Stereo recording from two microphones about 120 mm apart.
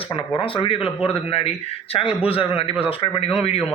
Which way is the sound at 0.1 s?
50° left (ahead or behind).